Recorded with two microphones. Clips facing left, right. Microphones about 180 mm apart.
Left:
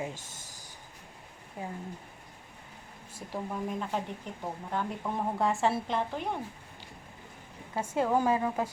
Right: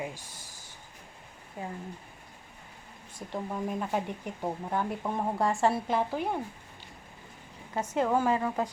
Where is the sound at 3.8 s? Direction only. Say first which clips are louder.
Right 3 dB; 10° right (ahead or behind).